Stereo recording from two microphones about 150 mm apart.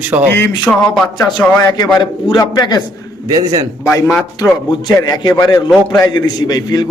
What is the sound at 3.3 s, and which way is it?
Speech, 25° right (ahead or behind).